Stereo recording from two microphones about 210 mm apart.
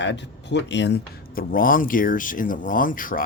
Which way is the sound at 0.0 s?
55° left (ahead or behind).